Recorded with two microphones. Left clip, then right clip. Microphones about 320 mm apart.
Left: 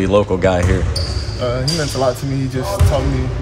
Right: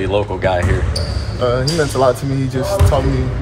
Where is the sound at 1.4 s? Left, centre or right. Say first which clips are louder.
Right 4 dB; centre.